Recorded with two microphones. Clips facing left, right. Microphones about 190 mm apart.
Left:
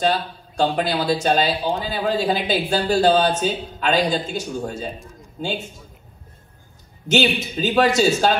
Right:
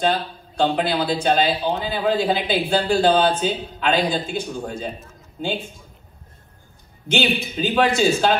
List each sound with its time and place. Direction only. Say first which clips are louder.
0.6 s a man's voice: even; 45° left (ahead or behind)
7.1 s a man's voice: left 2 dB; 45° left (ahead or behind)